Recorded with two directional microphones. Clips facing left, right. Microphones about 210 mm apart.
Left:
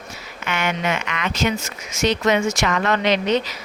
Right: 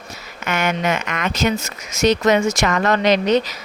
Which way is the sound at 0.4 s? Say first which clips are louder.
Right 3 dB; 45° right (ahead or behind).